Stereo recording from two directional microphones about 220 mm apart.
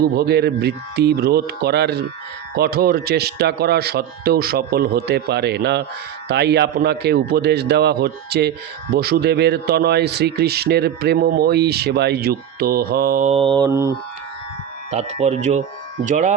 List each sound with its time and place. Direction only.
0.0 s speech: 45° right (ahead or behind); by 13.9 s 15° right (ahead or behind)
14.8 s speech: 30° right (ahead or behind)